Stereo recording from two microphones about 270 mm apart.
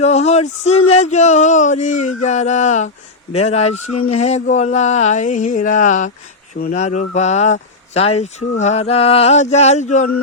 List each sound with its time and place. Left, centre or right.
0.0 s speech: left